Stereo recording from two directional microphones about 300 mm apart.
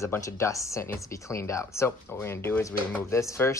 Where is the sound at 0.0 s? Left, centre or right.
Centre.